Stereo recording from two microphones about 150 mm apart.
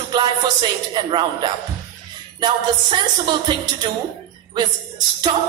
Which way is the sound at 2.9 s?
30° right (ahead or behind).